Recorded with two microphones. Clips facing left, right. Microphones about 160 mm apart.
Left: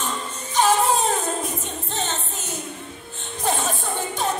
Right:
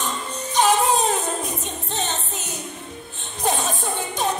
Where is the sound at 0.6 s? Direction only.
15° right (ahead or behind).